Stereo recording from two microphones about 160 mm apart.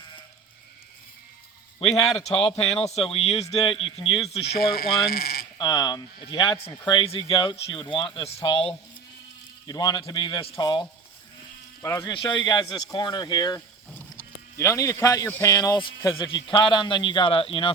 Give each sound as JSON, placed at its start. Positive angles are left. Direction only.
{"t": 2.1, "sound": "speech", "side_deg": 35}
{"t": 3.4, "sound": "a man's voice", "side_deg": 20}
{"t": 3.8, "sound": "speech", "side_deg": 35}
{"t": 4.5, "sound": "speech", "side_deg": 70}
{"t": 5.5, "sound": "a man's voice", "side_deg": 25}
{"t": 9.6, "sound": "a man's voice", "side_deg": 25}
{"t": 11.8, "sound": "speech", "side_deg": 15}
{"t": 12.1, "sound": "a man's voice", "side_deg": 30}